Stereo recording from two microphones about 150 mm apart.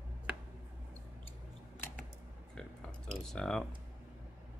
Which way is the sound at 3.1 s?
5° left (ahead or behind).